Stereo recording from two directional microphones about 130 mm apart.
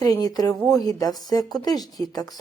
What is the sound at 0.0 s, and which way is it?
Speech, 30° left (ahead or behind).